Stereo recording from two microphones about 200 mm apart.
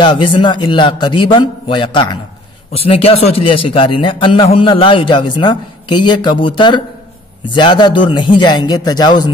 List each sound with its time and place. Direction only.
0.0 s a man's voice: 25° left (ahead or behind)